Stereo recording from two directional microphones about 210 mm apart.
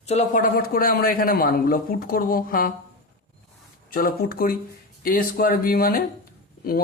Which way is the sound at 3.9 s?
45° left (ahead or behind).